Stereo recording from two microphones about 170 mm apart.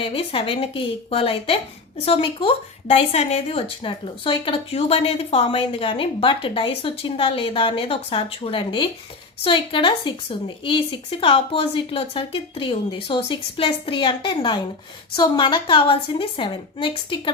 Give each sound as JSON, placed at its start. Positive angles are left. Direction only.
{"t": 0.0, "sound": "a woman's voice", "side_deg": 35}